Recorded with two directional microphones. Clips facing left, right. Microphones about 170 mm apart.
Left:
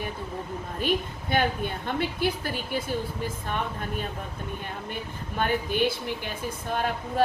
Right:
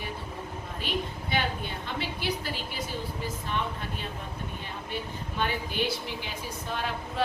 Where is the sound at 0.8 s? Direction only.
50° left (ahead or behind).